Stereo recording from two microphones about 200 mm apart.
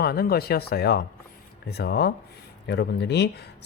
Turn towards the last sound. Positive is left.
turn(degrees=55)  # may be behind; listen again after turning